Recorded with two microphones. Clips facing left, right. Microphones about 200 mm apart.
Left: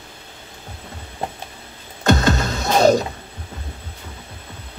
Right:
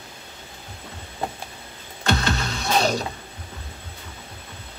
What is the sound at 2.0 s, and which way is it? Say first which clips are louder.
Music: left 7 dB; 45° left (ahead or behind).